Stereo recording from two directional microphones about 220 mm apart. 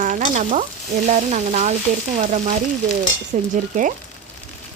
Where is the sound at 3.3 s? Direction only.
35° right (ahead or behind).